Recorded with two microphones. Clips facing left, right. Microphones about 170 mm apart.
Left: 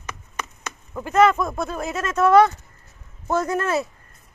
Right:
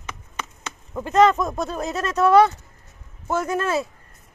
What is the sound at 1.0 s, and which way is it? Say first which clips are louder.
Speech: right 1 dB; 20° right (ahead or behind).